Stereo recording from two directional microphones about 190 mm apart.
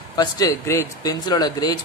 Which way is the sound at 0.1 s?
20° left (ahead or behind).